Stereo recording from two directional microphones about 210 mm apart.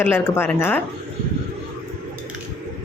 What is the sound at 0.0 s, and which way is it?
Speech, 10° left (ahead or behind).